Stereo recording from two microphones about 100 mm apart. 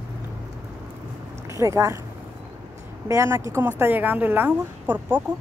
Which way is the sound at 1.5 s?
30° right (ahead or behind).